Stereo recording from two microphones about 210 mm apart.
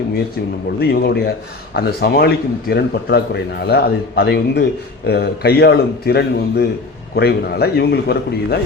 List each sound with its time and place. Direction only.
0.8 s a man's voice: 50° left (ahead or behind)